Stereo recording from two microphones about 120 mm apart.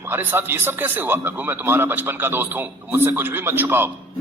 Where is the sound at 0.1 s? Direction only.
15° right (ahead or behind).